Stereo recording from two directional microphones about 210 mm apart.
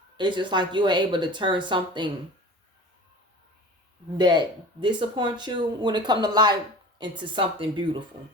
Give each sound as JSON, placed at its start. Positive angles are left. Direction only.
{"t": 0.2, "sound": "speech", "side_deg": -20}
{"t": 4.2, "sound": "speech", "side_deg": -20}